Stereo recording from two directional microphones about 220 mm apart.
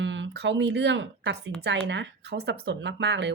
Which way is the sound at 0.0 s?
55° right (ahead or behind).